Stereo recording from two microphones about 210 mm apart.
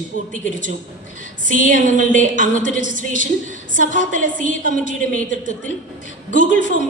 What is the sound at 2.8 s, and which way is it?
Speech, 60° left (ahead or behind).